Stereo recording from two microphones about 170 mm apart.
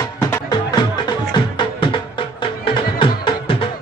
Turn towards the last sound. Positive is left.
turn(degrees=30)  # may be behind; listen again after turning